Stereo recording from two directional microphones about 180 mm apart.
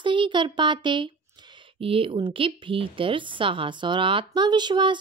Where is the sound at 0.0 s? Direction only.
25° right (ahead or behind).